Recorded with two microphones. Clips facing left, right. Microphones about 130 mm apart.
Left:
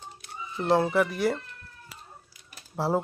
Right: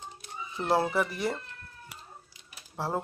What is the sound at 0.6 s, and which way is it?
Speech, 5° right (ahead or behind).